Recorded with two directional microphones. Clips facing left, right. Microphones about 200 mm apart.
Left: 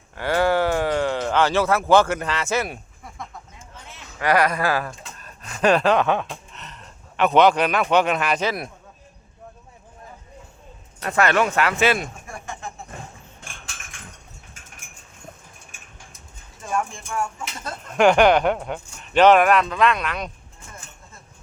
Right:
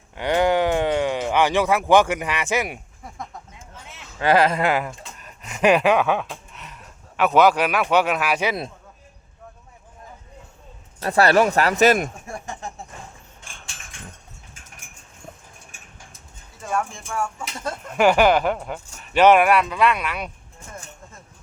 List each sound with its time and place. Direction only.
0.2 s a sound: 20° right (ahead or behind)
4.2 s speech: 25° right (ahead or behind); by 8.5 s 10° right (ahead or behind)
11.0 s speech: 35° right (ahead or behind)
17.9 s speech: 5° right (ahead or behind)